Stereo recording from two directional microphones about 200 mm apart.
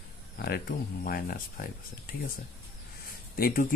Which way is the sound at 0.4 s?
50° left (ahead or behind).